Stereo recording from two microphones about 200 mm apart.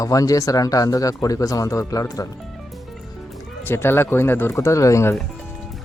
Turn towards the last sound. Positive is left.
turn(degrees=15)  # may be behind; listen again after turning